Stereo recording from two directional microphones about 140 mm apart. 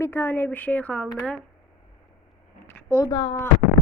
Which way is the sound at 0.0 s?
15° left (ahead or behind).